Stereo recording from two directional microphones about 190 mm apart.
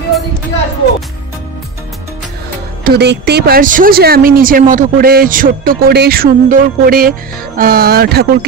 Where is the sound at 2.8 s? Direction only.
60° right (ahead or behind).